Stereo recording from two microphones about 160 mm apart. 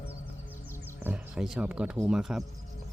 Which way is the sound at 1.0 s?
5° right (ahead or behind).